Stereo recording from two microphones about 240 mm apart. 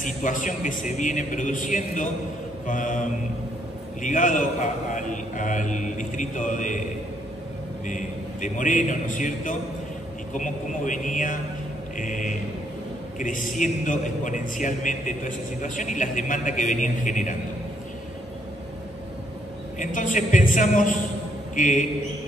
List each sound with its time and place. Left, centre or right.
0.0 s a man's voice: left
7.8 s a man's voice: left
19.8 s a man's voice: left